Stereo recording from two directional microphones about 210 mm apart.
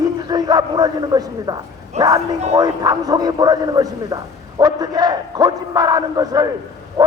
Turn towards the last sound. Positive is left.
turn(degrees=-15)  # may be behind; listen again after turning